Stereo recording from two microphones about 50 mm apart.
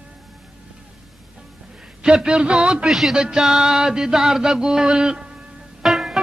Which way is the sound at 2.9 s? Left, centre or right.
Centre.